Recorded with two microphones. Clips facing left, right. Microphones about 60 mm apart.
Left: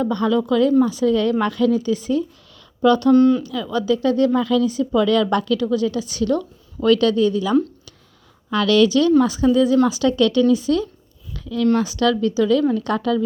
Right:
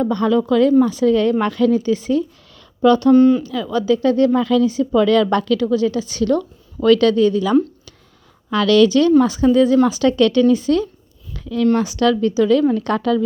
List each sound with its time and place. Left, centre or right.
0.0 s speech: right
3.2 s speech: centre
3.4 s speech: right
5.6 s speech: right
6.7 s speech: right
7.1 s speech: right
11.3 s a sound: right
11.8 s speech: right